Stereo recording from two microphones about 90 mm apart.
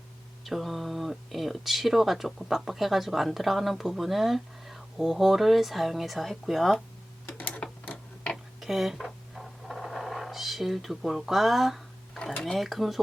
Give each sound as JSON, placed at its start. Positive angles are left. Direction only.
{"t": 0.4, "sound": "speech", "side_deg": 0}
{"t": 7.3, "sound": "tick-tock", "side_deg": 15}
{"t": 8.6, "sound": "a sound", "side_deg": 0}
{"t": 12.4, "sound": "speech", "side_deg": 0}